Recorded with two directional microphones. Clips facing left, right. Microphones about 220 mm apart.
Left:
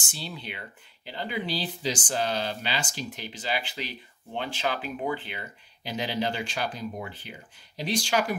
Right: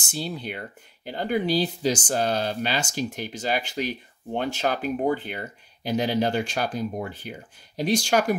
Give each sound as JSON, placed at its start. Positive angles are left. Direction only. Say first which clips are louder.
{"t": 0.0, "sound": "speech", "louder": "right 8 dB", "side_deg": -40}